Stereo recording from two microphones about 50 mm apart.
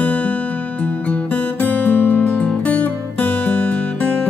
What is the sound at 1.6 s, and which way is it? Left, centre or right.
Music, left.